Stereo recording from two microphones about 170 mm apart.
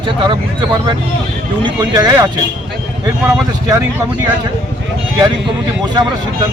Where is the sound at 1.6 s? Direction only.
25° right (ahead or behind).